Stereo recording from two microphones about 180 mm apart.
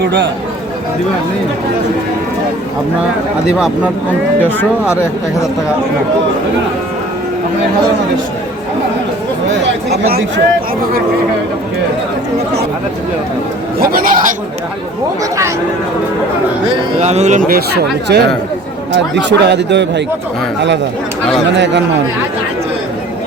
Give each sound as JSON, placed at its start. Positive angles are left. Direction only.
{"t": 0.0, "sound": "speech", "side_deg": -75}
{"t": 9.9, "sound": "speech", "side_deg": -60}
{"t": 13.7, "sound": "speech", "side_deg": -55}
{"t": 17.0, "sound": "speech", "side_deg": -40}
{"t": 18.9, "sound": "a man's voice", "side_deg": -75}
{"t": 21.5, "sound": "a man's voice", "side_deg": -80}